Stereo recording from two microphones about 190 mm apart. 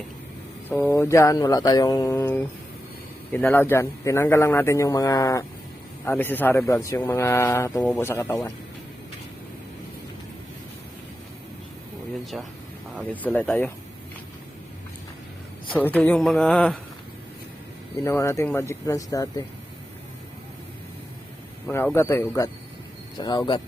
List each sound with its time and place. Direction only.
0.7 s speech: 15° left (ahead or behind)
12.2 s speech: centre (ahead or behind)
15.7 s speech: 10° left (ahead or behind)
18.0 s speech: 15° left (ahead or behind)
21.9 s speech: 15° left (ahead or behind)